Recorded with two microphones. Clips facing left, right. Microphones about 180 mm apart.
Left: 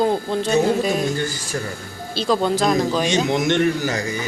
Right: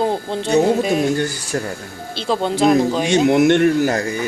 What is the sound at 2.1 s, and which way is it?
Speech, 20° right (ahead or behind).